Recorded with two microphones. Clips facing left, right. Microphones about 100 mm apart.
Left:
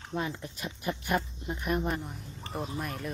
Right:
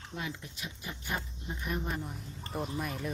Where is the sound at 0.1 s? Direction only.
40° left (ahead or behind).